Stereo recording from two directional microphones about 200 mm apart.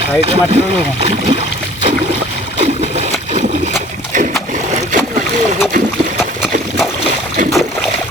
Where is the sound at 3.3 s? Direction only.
35° right (ahead or behind).